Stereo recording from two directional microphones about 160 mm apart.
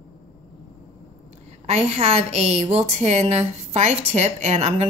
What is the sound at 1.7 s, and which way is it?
Speech, 40° right (ahead or behind).